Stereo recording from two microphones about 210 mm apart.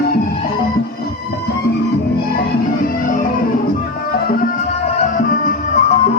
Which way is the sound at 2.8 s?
40° left (ahead or behind).